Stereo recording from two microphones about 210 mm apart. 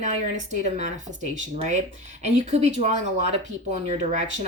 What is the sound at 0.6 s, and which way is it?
Speech, 35° right (ahead or behind).